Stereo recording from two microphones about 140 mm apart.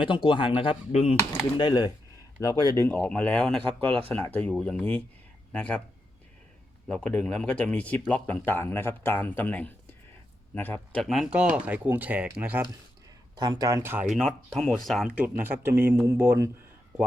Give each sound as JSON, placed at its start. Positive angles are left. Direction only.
{"t": 0.3, "sound": "speech", "side_deg": 35}
{"t": 1.5, "sound": "speech", "side_deg": 30}
{"t": 3.0, "sound": "speech", "side_deg": 10}
{"t": 3.8, "sound": "speech", "side_deg": -40}
{"t": 4.1, "sound": "speech", "side_deg": 10}
{"t": 6.8, "sound": "speech", "side_deg": 10}
{"t": 11.0, "sound": "speech", "side_deg": 0}
{"t": 13.3, "sound": "speech", "side_deg": -30}
{"t": 14.1, "sound": "speech", "side_deg": 0}
{"t": 15.1, "sound": "speech", "side_deg": -10}